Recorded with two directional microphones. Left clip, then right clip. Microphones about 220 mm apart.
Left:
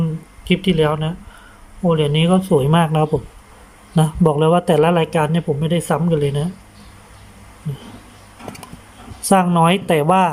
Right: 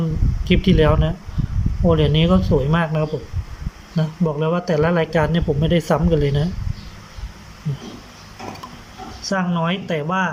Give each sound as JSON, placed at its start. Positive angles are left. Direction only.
{"t": 0.4, "sound": "a man's voice", "side_deg": 5}
{"t": 9.3, "sound": "speech", "side_deg": 20}